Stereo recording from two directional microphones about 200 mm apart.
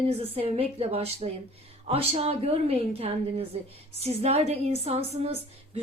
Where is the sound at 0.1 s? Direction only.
30° right (ahead or behind).